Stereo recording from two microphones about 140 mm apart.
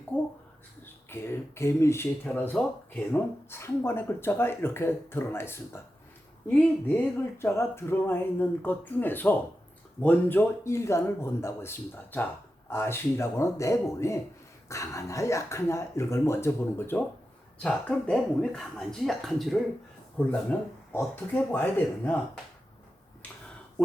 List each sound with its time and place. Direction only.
0.1 s speech: 10° left (ahead or behind)
7.4 s speech: 20° left (ahead or behind)